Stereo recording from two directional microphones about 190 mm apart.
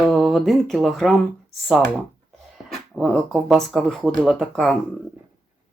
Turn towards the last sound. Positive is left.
turn(degrees=0)  # may be behind; listen again after turning